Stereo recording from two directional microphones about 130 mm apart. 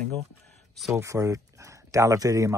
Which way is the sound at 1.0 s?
25° right (ahead or behind).